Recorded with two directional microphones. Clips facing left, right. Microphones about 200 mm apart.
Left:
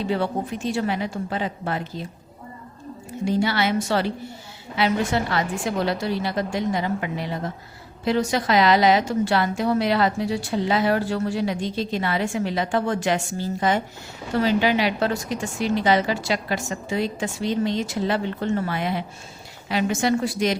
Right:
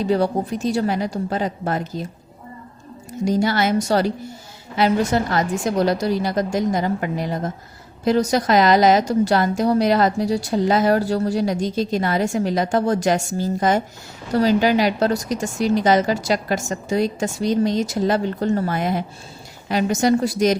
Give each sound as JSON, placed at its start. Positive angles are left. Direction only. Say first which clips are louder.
{"t": 0.0, "sound": "a woman's voice", "louder": "right 5 dB", "side_deg": -40}
{"t": 3.1, "sound": "a woman's voice", "louder": "right 3 dB", "side_deg": -40}